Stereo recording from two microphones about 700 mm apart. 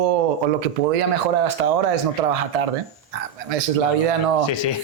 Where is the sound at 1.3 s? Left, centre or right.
Right.